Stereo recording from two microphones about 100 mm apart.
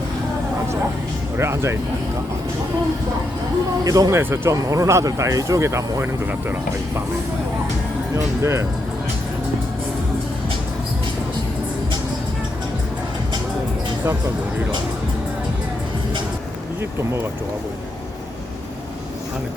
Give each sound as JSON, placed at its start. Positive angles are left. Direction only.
{"t": 1.4, "sound": "speech", "side_deg": -25}
{"t": 3.8, "sound": "speech", "side_deg": -35}
{"t": 4.2, "sound": "speech", "side_deg": -25}
{"t": 8.1, "sound": "speech", "side_deg": -30}